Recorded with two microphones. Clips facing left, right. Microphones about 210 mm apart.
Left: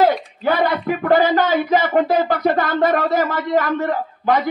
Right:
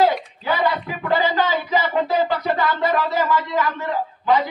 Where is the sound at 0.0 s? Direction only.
50° left (ahead or behind).